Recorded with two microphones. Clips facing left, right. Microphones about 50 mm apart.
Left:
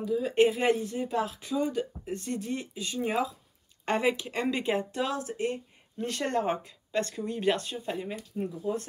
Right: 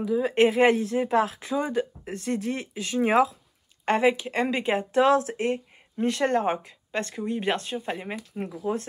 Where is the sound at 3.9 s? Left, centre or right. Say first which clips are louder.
Right 5 dB; right.